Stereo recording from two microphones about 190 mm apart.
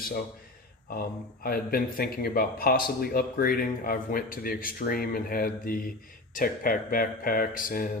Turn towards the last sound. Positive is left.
turn(degrees=45)  # may be behind; listen again after turning